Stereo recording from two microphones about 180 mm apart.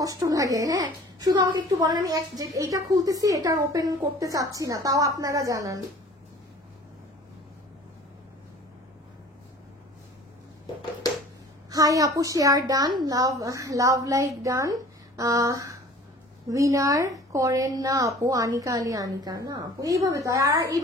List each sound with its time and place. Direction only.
0.0 s a woman's voice: 20° right (ahead or behind)
11.7 s a woman's voice: 20° right (ahead or behind)